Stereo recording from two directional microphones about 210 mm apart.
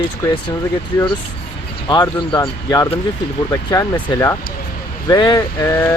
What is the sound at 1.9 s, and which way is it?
Speech, 20° left (ahead or behind).